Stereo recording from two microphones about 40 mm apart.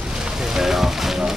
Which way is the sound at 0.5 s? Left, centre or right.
Centre.